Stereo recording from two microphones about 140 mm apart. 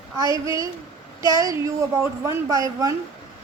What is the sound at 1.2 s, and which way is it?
A woman's voice, 25° right (ahead or behind).